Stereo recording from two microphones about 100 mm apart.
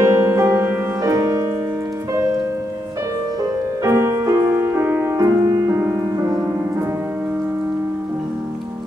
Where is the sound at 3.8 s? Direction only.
30° right (ahead or behind).